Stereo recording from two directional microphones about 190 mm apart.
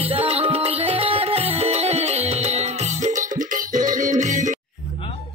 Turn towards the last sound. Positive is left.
turn(degrees=-40)  # may be behind; listen again after turning